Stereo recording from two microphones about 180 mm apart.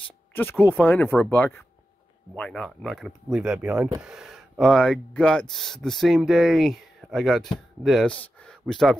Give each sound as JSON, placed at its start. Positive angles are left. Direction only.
{"t": 0.4, "sound": "speech", "side_deg": 10}